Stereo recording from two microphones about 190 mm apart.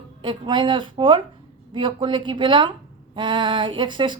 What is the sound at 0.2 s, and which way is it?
Speech, 25° right (ahead or behind).